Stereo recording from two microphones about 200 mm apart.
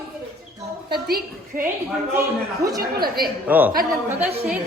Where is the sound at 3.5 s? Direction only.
10° right (ahead or behind).